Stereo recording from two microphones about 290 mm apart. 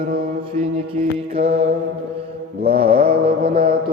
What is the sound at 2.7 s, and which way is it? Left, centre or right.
Speech, centre.